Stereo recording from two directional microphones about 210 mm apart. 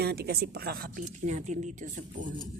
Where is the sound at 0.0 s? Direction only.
50° right (ahead or behind).